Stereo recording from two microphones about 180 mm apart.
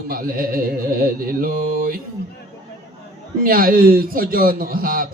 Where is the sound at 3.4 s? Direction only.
55° right (ahead or behind).